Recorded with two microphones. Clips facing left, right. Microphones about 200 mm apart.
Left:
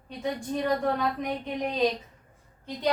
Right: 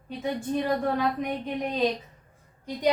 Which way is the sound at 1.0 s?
Centre (ahead or behind).